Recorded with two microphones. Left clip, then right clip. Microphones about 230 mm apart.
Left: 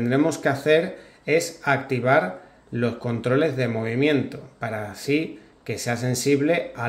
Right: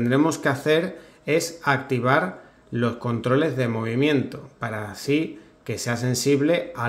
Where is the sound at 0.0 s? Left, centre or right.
Centre.